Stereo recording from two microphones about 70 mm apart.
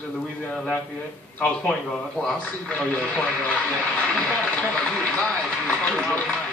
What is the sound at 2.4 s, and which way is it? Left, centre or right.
Speech, left.